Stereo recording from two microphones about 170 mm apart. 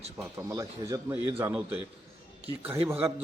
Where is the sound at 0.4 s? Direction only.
15° right (ahead or behind).